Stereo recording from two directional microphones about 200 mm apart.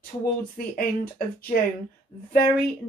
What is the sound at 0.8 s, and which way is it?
Speech, 45° left (ahead or behind).